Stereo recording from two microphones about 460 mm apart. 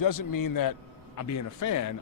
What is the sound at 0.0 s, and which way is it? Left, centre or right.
A man's voice, left.